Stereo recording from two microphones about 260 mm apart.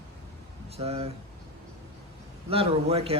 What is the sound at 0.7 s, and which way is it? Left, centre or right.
Speech, right.